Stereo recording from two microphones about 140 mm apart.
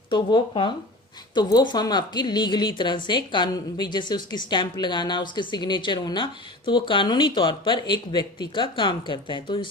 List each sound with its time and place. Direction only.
0.1 s a woman's voice: 35° left (ahead or behind)